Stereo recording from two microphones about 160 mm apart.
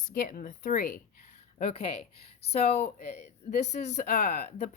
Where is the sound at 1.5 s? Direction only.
40° left (ahead or behind).